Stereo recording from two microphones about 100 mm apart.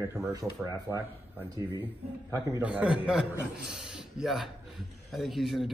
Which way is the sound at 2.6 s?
15° right (ahead or behind).